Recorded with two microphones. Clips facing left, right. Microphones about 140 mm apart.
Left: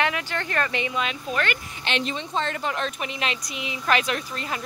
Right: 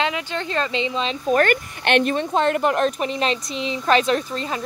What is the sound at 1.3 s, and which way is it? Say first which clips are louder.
Speech: right 13 dB; 45° right (ahead or behind).